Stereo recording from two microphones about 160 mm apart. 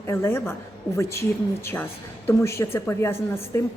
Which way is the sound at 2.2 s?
15° left (ahead or behind).